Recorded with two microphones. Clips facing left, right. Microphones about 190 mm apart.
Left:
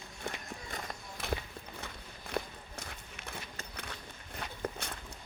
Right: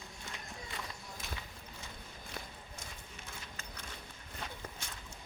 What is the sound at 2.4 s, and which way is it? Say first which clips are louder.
Walk: left 12 dB; 65° left (ahead or behind).